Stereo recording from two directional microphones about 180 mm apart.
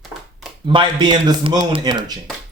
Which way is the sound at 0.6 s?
25° right (ahead or behind).